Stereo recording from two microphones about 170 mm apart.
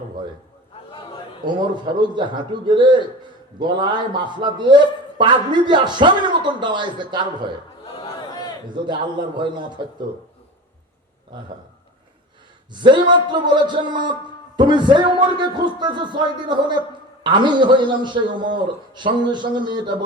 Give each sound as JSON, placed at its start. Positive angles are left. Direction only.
{"t": 1.5, "sound": "a man's voice", "side_deg": -25}
{"t": 7.9, "sound": "crowd", "side_deg": 25}
{"t": 8.7, "sound": "a man's voice", "side_deg": -25}
{"t": 12.7, "sound": "a man's voice", "side_deg": -25}